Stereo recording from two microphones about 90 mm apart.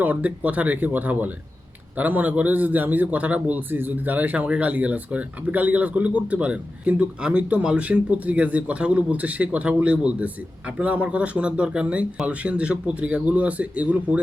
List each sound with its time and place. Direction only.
0.0 s a man's voice: 15° right (ahead or behind)